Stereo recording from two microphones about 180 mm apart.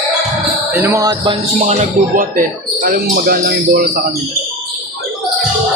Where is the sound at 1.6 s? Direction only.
40° right (ahead or behind).